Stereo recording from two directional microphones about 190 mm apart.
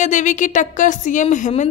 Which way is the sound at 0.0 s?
40° left (ahead or behind).